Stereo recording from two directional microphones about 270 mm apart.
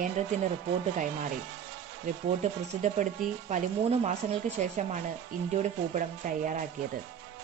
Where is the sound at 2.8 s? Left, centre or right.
Right.